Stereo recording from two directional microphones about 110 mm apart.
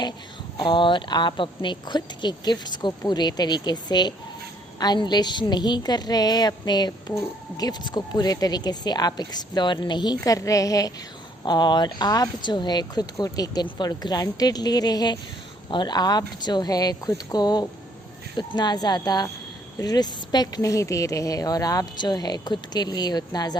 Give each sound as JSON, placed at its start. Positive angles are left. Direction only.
{"t": 0.5, "sound": "speech", "side_deg": 45}